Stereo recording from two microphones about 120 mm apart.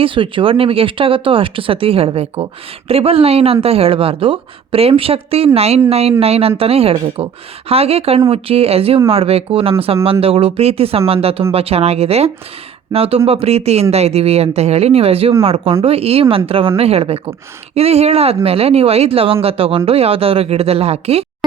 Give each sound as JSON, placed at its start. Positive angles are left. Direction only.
{"t": 0.0, "sound": "speech", "side_deg": -45}